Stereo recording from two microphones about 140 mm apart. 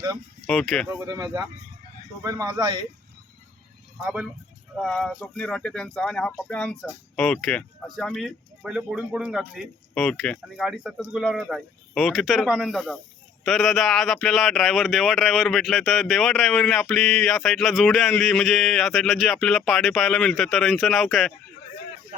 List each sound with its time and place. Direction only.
0.4 s speech: centre (ahead or behind)
0.9 s speech: 20° right (ahead or behind)
4.0 s speech: 10° right (ahead or behind)